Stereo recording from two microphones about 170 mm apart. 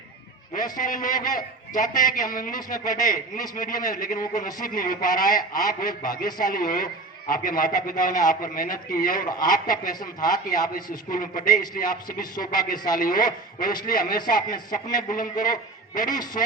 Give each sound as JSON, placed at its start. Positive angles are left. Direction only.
{"t": 0.5, "sound": "a man's voice", "side_deg": 50}
{"t": 2.9, "sound": "a man's voice", "side_deg": 20}
{"t": 3.5, "sound": "a man's voice", "side_deg": 55}
{"t": 5.4, "sound": "a man's voice", "side_deg": 20}
{"t": 6.4, "sound": "a man's voice", "side_deg": 55}
{"t": 9.9, "sound": "a man's voice", "side_deg": 25}
{"t": 10.2, "sound": "a man's voice", "side_deg": 55}